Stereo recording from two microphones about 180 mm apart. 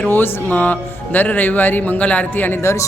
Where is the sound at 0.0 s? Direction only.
10° left (ahead or behind).